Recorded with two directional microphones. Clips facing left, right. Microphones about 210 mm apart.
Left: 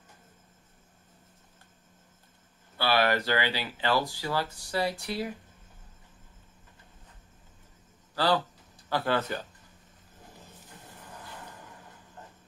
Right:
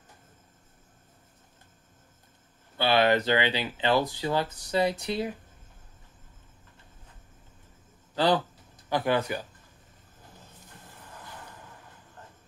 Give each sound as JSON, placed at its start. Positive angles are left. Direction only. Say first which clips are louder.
{"t": 2.8, "sound": "speech", "louder": "right 3 dB", "side_deg": -20}
{"t": 8.1, "sound": "a sound", "louder": "right 2 dB", "side_deg": -20}
{"t": 8.8, "sound": "speech", "louder": "right 2 dB", "side_deg": -15}